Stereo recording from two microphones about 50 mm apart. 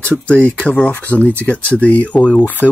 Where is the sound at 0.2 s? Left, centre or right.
Left.